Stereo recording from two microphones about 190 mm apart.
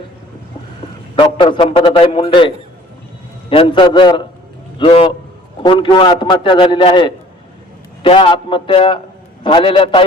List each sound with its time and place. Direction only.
1.2 s a man's voice: 25° left (ahead or behind)
3.5 s a man's voice: 25° left (ahead or behind)